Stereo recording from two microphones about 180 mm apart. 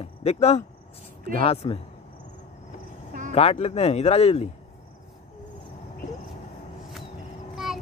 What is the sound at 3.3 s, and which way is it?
Speech, 35° left (ahead or behind).